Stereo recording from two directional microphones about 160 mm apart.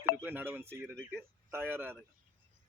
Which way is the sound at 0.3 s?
10° right (ahead or behind).